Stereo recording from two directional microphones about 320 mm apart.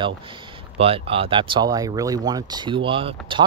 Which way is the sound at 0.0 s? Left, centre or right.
Centre.